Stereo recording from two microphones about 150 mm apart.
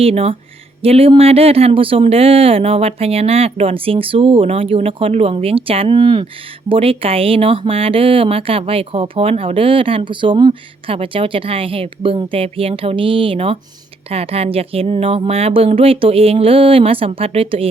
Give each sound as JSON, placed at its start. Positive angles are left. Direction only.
{"t": 0.0, "sound": "speech", "side_deg": -40}